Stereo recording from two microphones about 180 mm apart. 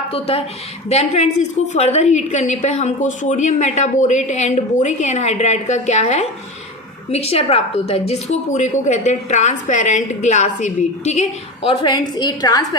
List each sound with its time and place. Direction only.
0.1 s a woman's voice: 35° left (ahead or behind)